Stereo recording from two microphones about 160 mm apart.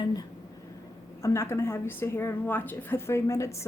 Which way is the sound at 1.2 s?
15° left (ahead or behind).